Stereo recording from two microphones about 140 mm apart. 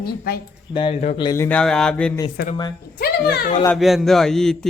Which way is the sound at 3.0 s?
90° left.